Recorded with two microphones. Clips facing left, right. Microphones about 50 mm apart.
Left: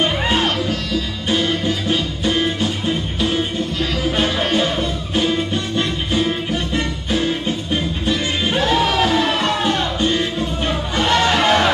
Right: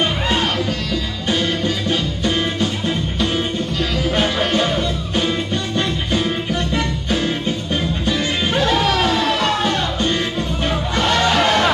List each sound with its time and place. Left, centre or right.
0.0 s music: centre
4.2 s music: centre
8.1 s music: centre
11.3 s music: centre